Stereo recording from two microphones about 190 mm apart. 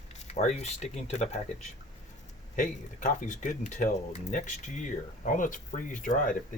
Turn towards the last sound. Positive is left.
turn(degrees=45)  # may be behind; listen again after turning